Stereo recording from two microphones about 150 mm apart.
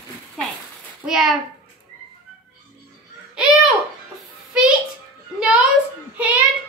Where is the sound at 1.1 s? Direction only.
Centre (ahead or behind).